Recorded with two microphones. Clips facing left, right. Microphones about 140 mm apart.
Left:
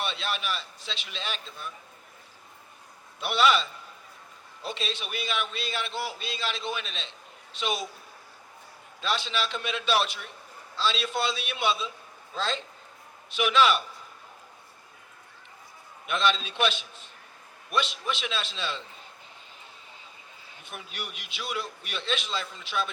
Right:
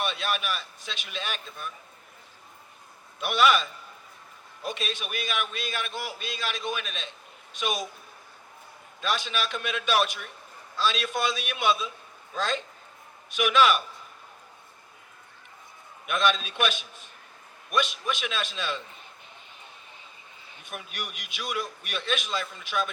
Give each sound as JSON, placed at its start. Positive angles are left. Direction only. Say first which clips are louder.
{"t": 0.0, "sound": "a man's voice", "louder": "right 2 dB", "side_deg": -50}
{"t": 3.2, "sound": "a man's voice", "louder": "right 1 dB", "side_deg": -50}
{"t": 4.7, "sound": "a man's voice", "louder": "even", "side_deg": -50}
{"t": 5.9, "sound": "a man's voice", "louder": "left 2 dB", "side_deg": -15}
{"t": 6.1, "sound": "a man's voice", "louder": "even", "side_deg": -50}
{"t": 9.0, "sound": "a man's voice", "louder": "even", "side_deg": -50}
{"t": 16.0, "sound": "a man's voice", "louder": "right 1 dB", "side_deg": -50}
{"t": 18.1, "sound": "a man's voice", "louder": "right 1 dB", "side_deg": -50}
{"t": 20.7, "sound": "a man's voice", "louder": "right 2 dB", "side_deg": -50}